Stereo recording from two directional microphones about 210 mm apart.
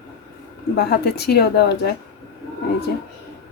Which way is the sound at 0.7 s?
50° left (ahead or behind).